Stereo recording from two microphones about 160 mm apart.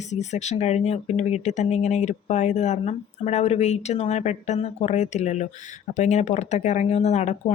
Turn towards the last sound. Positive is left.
turn(degrees=45)  # may be behind; listen again after turning